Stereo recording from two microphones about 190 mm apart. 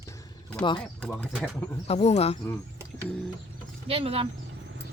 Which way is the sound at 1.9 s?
35° left (ahead or behind).